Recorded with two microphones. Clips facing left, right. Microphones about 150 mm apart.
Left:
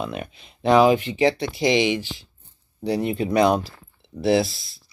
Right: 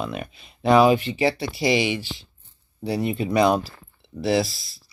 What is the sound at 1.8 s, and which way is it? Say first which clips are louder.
Speech: left 3 dB; 15° left (ahead or behind).